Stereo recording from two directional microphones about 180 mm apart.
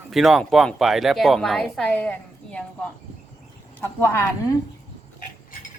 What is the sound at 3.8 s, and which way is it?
Speech, 15° left (ahead or behind).